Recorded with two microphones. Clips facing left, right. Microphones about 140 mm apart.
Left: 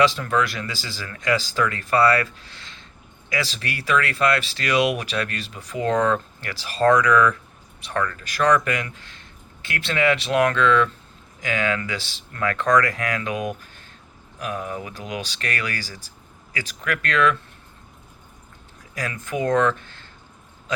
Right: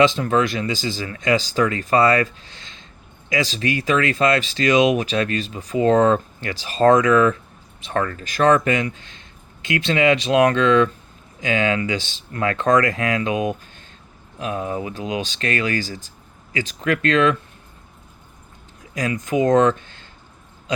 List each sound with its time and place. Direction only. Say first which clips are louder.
0.0 s speech: right 3 dB; 20° right (ahead or behind)
18.9 s speech: right 6 dB; 20° right (ahead or behind)
20.7 s a sound: right 3 dB; 20° right (ahead or behind)